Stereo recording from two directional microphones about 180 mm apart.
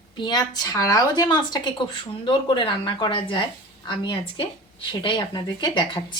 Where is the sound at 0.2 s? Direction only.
25° left (ahead or behind).